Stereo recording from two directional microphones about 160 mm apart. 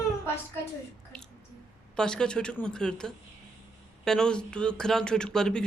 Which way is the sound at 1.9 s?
5° left (ahead or behind).